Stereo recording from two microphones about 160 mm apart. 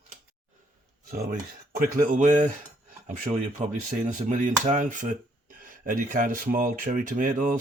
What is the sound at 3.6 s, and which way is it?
Speech, 45° right (ahead or behind).